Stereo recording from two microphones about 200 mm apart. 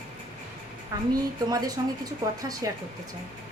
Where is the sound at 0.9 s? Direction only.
20° right (ahead or behind).